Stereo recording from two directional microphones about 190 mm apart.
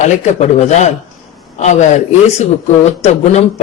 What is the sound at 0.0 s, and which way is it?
Speech, 40° left (ahead or behind).